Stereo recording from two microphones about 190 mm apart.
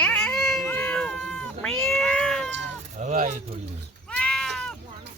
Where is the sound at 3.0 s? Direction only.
40° right (ahead or behind).